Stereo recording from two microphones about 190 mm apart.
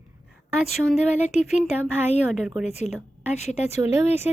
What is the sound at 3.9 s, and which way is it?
Speech, 15° right (ahead or behind).